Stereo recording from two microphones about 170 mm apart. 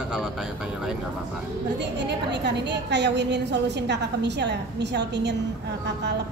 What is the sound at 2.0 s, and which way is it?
A woman's voice, 85° right.